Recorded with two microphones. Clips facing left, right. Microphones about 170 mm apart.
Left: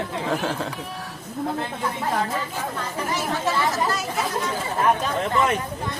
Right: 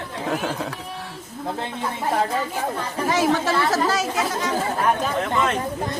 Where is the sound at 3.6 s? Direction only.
90° right.